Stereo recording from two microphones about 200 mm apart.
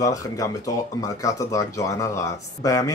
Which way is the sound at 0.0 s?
15° left (ahead or behind).